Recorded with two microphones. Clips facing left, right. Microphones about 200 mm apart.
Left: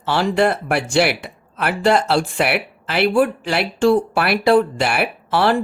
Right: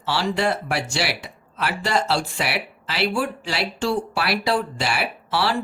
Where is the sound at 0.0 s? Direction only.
55° left (ahead or behind).